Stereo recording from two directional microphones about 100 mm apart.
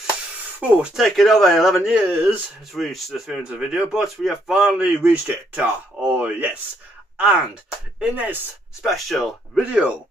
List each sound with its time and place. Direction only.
0.6 s speech: 15° right (ahead or behind)
0.9 s a man's voice: centre (ahead or behind)
2.0 s speech: 15° right (ahead or behind)
2.7 s a man's voice: centre (ahead or behind)
8.0 s speech: 15° right (ahead or behind)
8.8 s a man's voice: centre (ahead or behind)
9.7 s speech: 10° right (ahead or behind)